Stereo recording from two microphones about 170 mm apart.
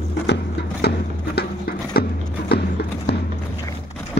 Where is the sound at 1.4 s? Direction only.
65° left (ahead or behind).